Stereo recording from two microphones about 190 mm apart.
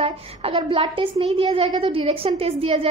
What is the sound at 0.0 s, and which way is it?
A woman's voice, 30° right (ahead or behind).